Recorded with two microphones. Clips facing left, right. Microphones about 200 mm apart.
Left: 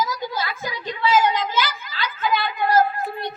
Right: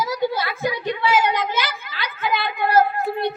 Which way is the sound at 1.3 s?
60° right (ahead or behind).